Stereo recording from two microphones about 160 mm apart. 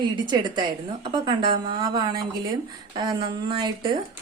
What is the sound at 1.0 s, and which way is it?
A woman's voice, 30° right (ahead or behind).